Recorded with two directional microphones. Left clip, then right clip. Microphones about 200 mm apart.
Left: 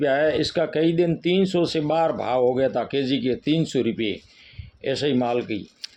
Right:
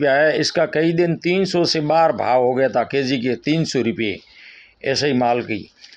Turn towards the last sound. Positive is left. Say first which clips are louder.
# right 5 dB
turn(degrees=-20)  # may be behind; listen again after turning